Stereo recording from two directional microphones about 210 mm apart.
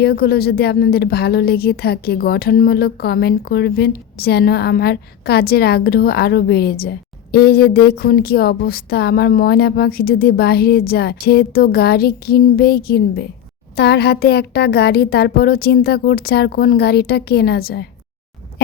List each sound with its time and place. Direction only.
0.0 s a woman's voice: 50° left (ahead or behind)